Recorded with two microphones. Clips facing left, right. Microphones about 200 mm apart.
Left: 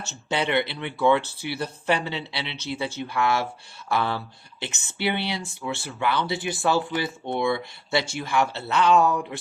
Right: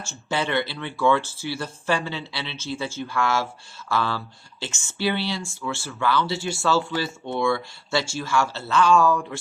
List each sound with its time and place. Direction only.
0.3 s speech: 20° left (ahead or behind)